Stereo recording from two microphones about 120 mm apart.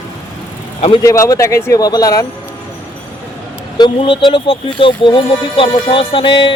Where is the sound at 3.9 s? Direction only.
45° left (ahead or behind).